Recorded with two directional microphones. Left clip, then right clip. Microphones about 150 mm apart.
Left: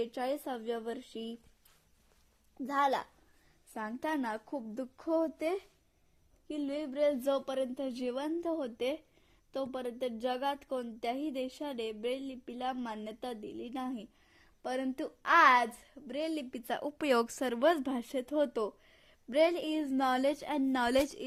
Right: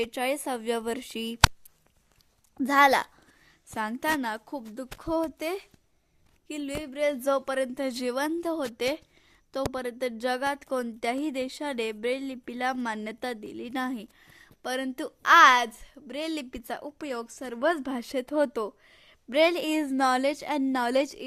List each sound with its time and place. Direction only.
0.0 s speech: 25° right (ahead or behind)
2.6 s speech: 45° right (ahead or behind)
3.8 s a woman's voice: 25° right (ahead or behind)
16.6 s a woman's voice: centre (ahead or behind)
17.0 s a woman's voice: 20° left (ahead or behind)
17.6 s a woman's voice: 10° right (ahead or behind); by 19.9 s 25° right (ahead or behind)
19.9 s a woman's voice: 15° right (ahead or behind)